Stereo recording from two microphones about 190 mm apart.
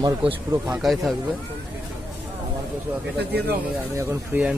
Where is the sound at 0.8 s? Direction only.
Centre (ahead or behind).